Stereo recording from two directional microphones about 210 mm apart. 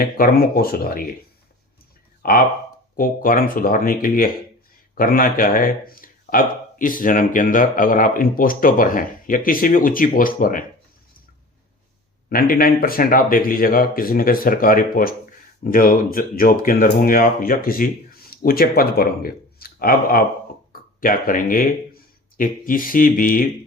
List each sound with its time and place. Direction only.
0.0 s speech: 45° left (ahead or behind)
2.2 s speech: 45° left (ahead or behind)
12.3 s speech: 45° left (ahead or behind)